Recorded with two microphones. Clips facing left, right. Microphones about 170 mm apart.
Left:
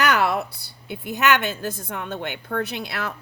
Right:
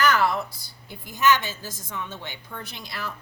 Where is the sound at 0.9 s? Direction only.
65° left (ahead or behind).